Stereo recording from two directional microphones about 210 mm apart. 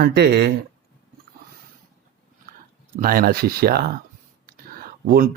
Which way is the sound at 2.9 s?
45° right (ahead or behind).